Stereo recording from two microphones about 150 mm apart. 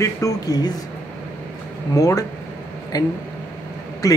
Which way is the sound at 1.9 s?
25° left (ahead or behind).